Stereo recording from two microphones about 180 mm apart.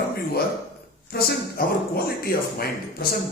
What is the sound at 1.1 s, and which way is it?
A man's voice, 60° left (ahead or behind).